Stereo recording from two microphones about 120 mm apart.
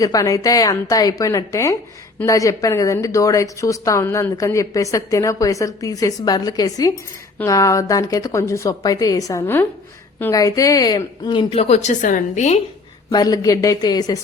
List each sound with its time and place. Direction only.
0.0 s a woman's voice: 30° left (ahead or behind); by 12.5 s 85° left
13.1 s a woman's voice: 30° left (ahead or behind)